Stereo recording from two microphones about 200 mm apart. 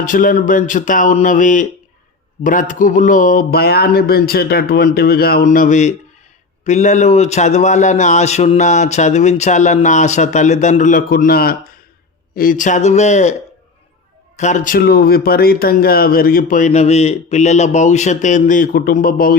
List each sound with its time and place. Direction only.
0.0 s speech: 40° left (ahead or behind)
14.3 s speech: 35° left (ahead or behind)